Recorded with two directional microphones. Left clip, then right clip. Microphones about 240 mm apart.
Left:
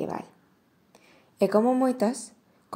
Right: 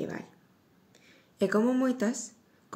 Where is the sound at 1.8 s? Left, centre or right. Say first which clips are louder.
Left 5 dB; centre.